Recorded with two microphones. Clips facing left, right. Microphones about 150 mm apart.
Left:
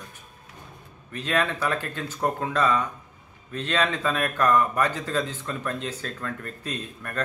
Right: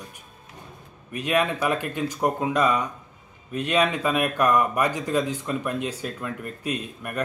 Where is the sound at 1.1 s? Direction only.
15° right (ahead or behind).